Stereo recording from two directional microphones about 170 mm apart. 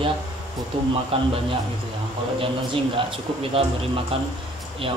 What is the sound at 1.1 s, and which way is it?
Music, 35° right (ahead or behind).